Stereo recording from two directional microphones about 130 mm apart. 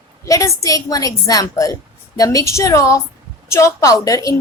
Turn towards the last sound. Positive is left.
turn(degrees=25)  # may be behind; listen again after turning